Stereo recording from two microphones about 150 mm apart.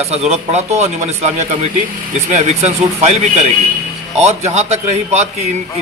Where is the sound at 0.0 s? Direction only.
45° right (ahead or behind).